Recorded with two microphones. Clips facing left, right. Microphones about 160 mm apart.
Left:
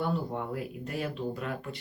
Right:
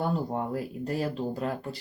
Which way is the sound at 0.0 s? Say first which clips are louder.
Right 3 dB; 40° right (ahead or behind).